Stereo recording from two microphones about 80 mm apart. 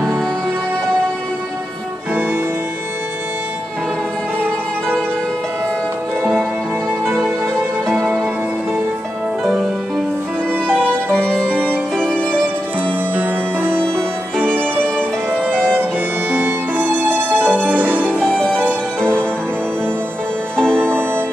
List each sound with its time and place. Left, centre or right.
7.1 s music: centre
9.4 s music: centre
10.7 s music: centre
12.8 s music: right
14.4 s violin: right
15.7 s violin: right
18.2 s music: centre
20.5 s music: centre
20.8 s music: right